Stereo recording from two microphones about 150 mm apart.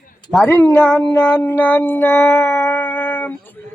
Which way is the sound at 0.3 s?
10° left (ahead or behind).